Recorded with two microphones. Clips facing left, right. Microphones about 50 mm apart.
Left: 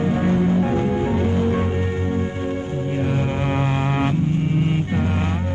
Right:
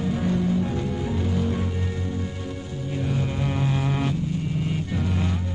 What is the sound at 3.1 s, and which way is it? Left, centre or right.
Music, left.